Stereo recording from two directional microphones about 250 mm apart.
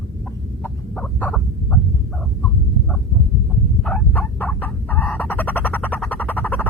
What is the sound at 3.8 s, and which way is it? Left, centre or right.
Fowl, centre.